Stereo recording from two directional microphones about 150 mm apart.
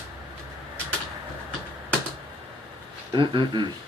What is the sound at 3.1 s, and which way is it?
Speech, 30° right (ahead or behind).